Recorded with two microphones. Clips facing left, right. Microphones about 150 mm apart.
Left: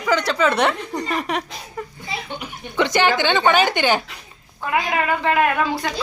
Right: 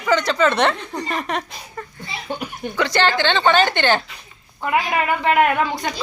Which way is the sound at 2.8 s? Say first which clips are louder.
Left 1 dB; 15° left (ahead or behind).